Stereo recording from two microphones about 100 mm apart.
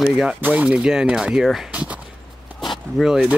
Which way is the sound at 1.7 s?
15° right (ahead or behind).